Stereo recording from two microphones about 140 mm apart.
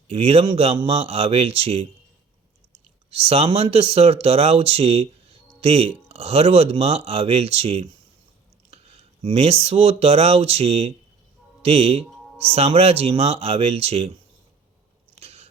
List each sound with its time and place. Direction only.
0.1 s speech: 45° right (ahead or behind)
3.1 s speech: 45° right (ahead or behind)
15.2 s biting: 50° right (ahead or behind)